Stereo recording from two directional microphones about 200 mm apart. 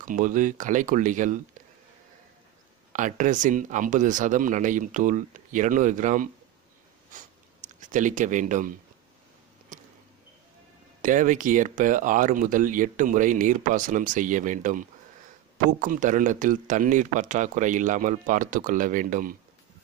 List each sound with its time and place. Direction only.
0.0 s speech: 40° right (ahead or behind)
2.9 s speech: 40° right (ahead or behind)
7.1 s a sound: 40° right (ahead or behind)
11.0 s speech: 40° right (ahead or behind)